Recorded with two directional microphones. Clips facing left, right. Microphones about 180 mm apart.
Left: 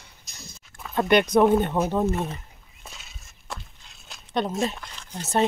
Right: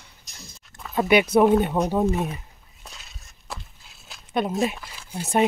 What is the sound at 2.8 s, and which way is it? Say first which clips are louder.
Walk: even; centre (ahead or behind).